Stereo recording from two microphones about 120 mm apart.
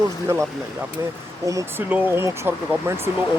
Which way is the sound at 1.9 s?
20° right (ahead or behind).